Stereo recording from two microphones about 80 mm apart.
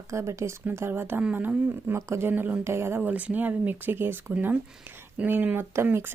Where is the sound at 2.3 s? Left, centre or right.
Right.